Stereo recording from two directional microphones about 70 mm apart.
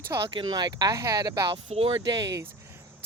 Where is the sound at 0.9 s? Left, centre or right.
Right.